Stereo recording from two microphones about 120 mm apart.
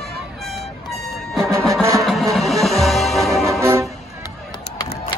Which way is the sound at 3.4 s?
25° right (ahead or behind).